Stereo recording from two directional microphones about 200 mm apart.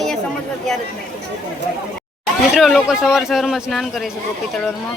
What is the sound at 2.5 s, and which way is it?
Speech, centre (ahead or behind).